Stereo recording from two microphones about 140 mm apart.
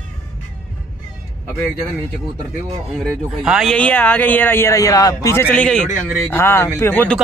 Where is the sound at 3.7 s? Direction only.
10° left (ahead or behind).